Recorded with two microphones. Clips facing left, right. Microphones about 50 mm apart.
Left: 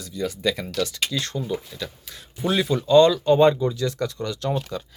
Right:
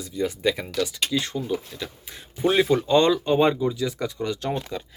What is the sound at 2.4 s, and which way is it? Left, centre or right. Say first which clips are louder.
Speech: right 3 dB; right.